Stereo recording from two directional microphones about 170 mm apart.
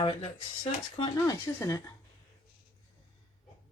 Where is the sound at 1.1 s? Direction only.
20° left (ahead or behind).